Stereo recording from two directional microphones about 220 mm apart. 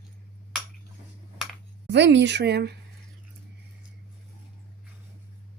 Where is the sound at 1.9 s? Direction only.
55° right (ahead or behind).